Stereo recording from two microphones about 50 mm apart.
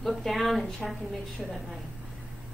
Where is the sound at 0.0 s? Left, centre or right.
Centre.